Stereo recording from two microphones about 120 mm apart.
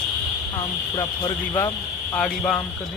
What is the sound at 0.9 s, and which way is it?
Speech, 35° left (ahead or behind).